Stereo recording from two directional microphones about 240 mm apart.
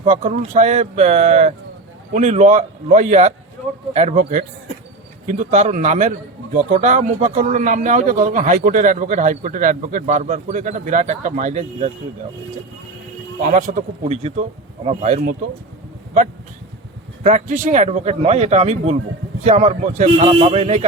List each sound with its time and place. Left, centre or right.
0.0 s a man's voice: right
13.4 s speech: right
17.2 s speech: right